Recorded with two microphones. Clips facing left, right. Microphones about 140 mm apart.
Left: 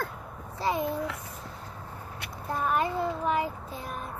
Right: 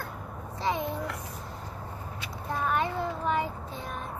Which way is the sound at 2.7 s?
5° left (ahead or behind).